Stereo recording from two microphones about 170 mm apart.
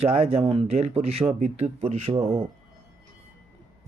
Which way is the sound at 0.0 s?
35° right (ahead or behind).